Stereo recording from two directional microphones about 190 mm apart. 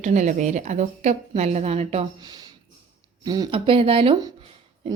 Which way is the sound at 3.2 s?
20° right (ahead or behind).